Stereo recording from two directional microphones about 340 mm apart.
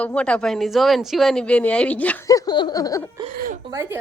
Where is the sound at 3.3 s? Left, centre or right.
Right.